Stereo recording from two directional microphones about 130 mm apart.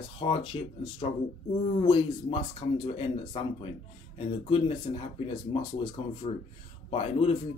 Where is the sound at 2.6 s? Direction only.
50° left (ahead or behind).